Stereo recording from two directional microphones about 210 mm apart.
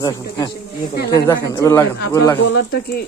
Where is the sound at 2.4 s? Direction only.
50° left (ahead or behind).